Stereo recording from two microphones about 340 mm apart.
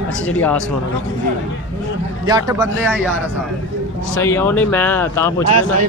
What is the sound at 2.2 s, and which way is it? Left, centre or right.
Speech, centre.